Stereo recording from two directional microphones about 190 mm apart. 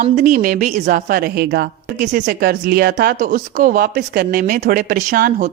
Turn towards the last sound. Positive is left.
turn(degrees=-55)  # may be behind; listen again after turning